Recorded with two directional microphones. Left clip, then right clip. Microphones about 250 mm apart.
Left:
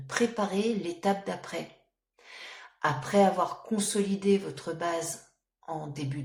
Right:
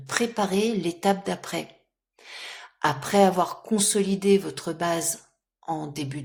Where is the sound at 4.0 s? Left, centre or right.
Right.